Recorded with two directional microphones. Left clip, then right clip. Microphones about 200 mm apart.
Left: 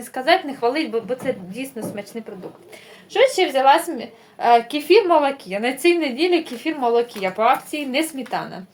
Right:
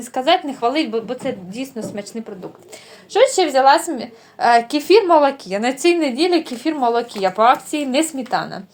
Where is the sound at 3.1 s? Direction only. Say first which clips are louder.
Right 3 dB; 40° right (ahead or behind).